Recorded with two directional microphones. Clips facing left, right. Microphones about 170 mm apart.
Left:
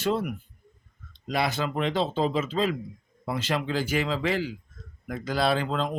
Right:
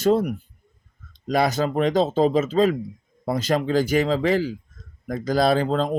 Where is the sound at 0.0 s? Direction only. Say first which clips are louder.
Right 7 dB; 40° right (ahead or behind).